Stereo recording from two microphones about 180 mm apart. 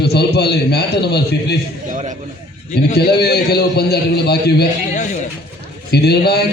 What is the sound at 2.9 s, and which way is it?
A man's voice, 60° left (ahead or behind).